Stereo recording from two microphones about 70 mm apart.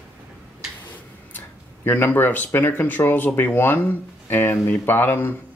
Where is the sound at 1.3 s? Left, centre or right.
Left.